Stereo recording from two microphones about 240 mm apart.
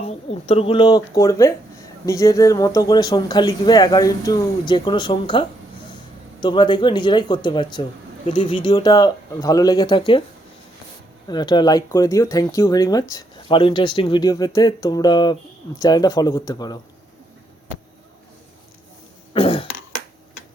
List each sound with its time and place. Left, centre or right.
0.0 s speech: left
11.3 s speech: centre
19.3 s cough: left